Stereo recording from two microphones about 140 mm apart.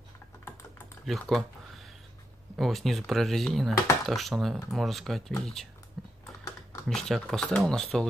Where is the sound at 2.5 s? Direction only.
Centre (ahead or behind).